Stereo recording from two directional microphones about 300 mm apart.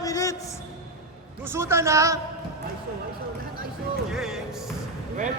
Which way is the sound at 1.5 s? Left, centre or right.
Centre.